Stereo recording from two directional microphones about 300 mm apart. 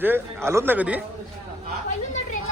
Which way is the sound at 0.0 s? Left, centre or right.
Centre.